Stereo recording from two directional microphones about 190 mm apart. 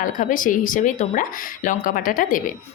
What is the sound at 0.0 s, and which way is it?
A woman's voice, 45° left (ahead or behind).